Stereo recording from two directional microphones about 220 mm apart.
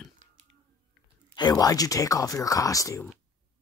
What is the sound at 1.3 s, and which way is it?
Speech, 20° left (ahead or behind).